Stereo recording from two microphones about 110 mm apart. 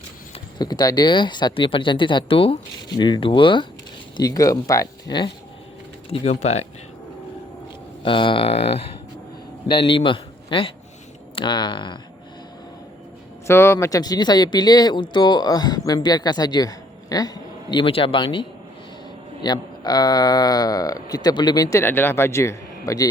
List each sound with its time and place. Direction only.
0.6 s speech: 40° left (ahead or behind)
4.2 s speech: 30° left (ahead or behind)
6.1 s speech: 70° left (ahead or behind)
8.0 s speech: 50° left (ahead or behind); by 8.8 s 65° left (ahead or behind)
9.6 s a man's voice: 50° left (ahead or behind)
13.5 s a man's voice: 25° left (ahead or behind)
21.8 s a man's voice: 20° left (ahead or behind)